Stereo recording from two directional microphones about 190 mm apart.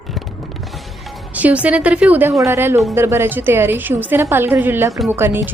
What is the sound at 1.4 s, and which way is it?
Speech, 10° right (ahead or behind).